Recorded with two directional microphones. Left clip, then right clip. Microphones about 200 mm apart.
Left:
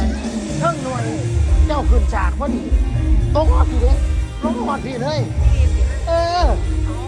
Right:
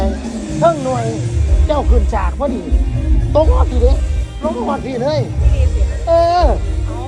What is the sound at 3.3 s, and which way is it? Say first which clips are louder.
Speech: right 5 dB; 15° right (ahead or behind).